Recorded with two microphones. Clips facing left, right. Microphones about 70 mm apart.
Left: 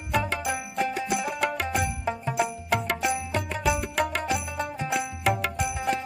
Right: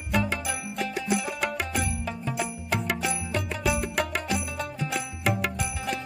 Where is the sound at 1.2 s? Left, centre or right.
Centre.